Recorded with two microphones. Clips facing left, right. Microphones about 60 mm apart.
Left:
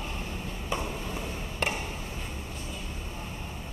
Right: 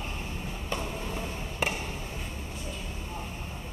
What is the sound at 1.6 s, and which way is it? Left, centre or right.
Chop, centre.